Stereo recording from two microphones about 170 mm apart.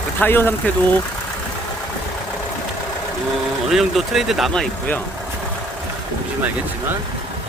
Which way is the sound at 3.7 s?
Centre (ahead or behind).